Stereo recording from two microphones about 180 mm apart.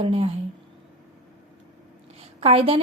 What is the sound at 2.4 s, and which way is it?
Speech, 30° right (ahead or behind).